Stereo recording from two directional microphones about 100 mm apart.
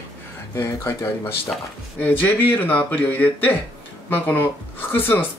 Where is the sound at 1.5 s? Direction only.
Centre (ahead or behind).